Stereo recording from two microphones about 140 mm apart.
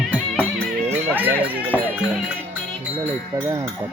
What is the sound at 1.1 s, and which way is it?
Music, 15° right (ahead or behind).